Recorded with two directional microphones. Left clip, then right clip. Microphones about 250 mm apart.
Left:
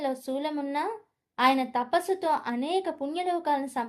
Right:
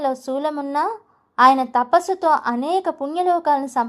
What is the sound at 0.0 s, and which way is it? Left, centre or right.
A woman's voice, centre.